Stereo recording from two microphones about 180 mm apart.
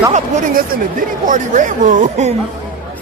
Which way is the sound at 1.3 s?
45° right (ahead or behind).